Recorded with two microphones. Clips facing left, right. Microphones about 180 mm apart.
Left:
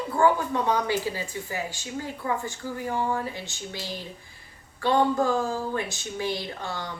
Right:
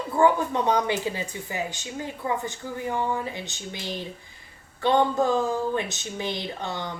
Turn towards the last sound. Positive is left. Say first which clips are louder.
# right 2 dB
turn(degrees=-20)  # may be behind; listen again after turning